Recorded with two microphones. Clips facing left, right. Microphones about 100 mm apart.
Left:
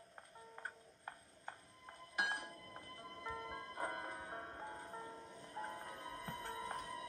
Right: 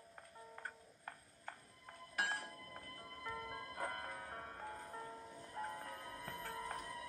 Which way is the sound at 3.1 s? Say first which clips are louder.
Even; centre (ahead or behind).